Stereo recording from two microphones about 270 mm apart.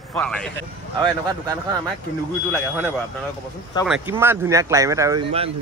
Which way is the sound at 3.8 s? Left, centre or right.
Centre.